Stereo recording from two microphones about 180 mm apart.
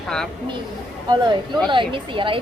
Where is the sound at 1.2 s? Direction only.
25° right (ahead or behind).